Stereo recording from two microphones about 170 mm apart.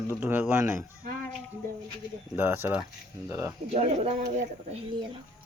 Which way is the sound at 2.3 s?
15° right (ahead or behind).